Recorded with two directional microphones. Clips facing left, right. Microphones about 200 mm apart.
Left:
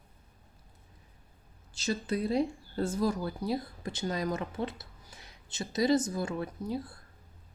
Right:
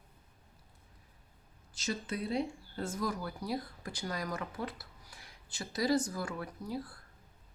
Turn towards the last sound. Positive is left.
turn(degrees=25)  # may be behind; listen again after turning